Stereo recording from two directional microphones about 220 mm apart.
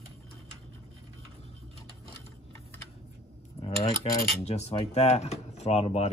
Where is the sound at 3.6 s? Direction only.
20° left (ahead or behind).